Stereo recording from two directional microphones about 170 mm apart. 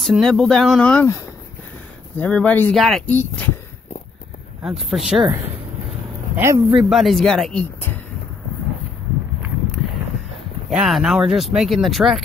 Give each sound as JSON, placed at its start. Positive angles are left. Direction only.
{"t": 0.0, "sound": "speech", "side_deg": 0}
{"t": 2.1, "sound": "speech", "side_deg": 5}
{"t": 4.6, "sound": "speech", "side_deg": 0}
{"t": 6.3, "sound": "a man's voice", "side_deg": -15}
{"t": 6.7, "sound": "speech", "side_deg": -5}
{"t": 10.7, "sound": "speech", "side_deg": 0}